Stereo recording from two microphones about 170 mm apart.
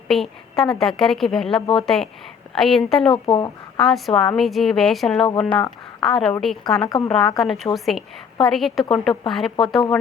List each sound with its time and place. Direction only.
0.1 s a woman's voice: centre (ahead or behind)
3.1 s speech: 30° left (ahead or behind)
3.8 s a woman's voice: centre (ahead or behind)
5.5 s speech: 25° left (ahead or behind)
6.0 s a woman's voice: centre (ahead or behind)
6.8 s speech: 20° left (ahead or behind)
7.3 s a woman's voice: centre (ahead or behind)